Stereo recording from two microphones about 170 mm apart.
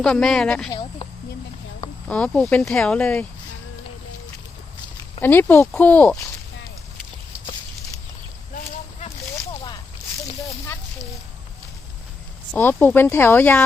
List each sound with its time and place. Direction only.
0.0 s speech: 5° left (ahead or behind)
0.7 s speech: 30° left (ahead or behind)
2.0 s speech: 5° left (ahead or behind)
5.2 s speech: 10° left (ahead or behind)
8.5 s a sound: 40° left (ahead or behind)
12.5 s speech: 10° left (ahead or behind)